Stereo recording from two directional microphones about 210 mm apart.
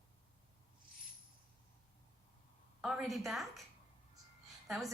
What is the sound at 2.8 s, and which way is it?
Speech, centre (ahead or behind).